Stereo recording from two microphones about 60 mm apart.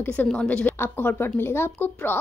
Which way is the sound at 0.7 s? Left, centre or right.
Left.